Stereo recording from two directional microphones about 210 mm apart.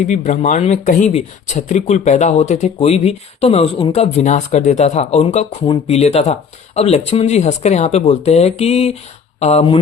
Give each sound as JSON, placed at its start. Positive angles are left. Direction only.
{"t": 0.0, "sound": "speech", "side_deg": 35}